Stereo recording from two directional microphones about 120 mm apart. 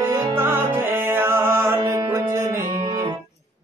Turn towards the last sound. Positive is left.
turn(degrees=-30)  # may be behind; listen again after turning